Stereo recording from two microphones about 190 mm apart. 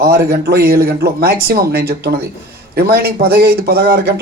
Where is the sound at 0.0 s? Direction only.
55° right (ahead or behind).